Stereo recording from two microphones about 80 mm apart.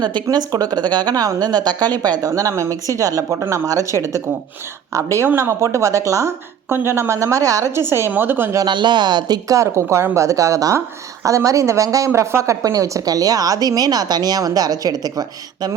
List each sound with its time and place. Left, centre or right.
0.0 s a woman's voice: right
7.8 s a woman's voice: right
8.6 s speech: right
9.6 s a woman's voice: right